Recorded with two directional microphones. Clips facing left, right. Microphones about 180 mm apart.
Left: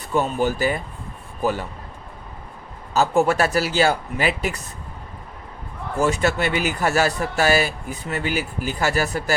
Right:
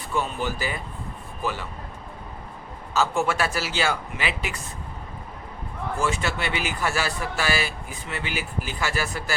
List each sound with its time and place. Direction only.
0.1 s a man's voice: 45° left (ahead or behind)
2.9 s speech: 40° left (ahead or behind)
6.0 s a man's voice: 40° left (ahead or behind)